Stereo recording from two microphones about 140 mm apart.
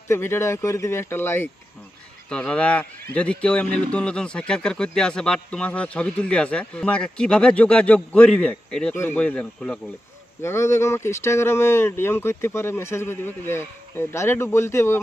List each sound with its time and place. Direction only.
0.1 s speech: 15° left (ahead or behind)
10.4 s speech: 20° left (ahead or behind)